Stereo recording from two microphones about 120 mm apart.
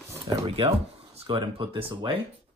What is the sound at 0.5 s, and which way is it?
Speech, 55° right (ahead or behind).